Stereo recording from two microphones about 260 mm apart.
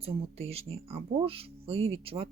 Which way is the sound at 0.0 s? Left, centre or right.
Right.